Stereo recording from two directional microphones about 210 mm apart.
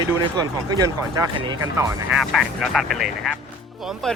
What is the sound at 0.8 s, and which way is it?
Speech, 15° right (ahead or behind).